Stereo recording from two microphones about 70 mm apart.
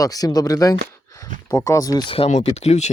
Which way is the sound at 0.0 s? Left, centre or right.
Left.